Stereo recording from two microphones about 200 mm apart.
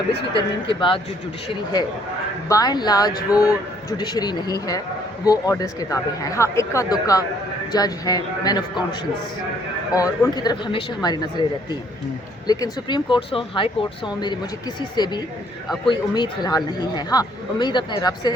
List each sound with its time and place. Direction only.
0.3 s speech: 25° left (ahead or behind)
2.5 s speech: 20° left (ahead or behind)
14.8 s speech: 20° left (ahead or behind)